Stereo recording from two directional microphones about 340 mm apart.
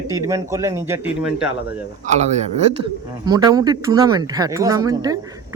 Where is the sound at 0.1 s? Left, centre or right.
Centre.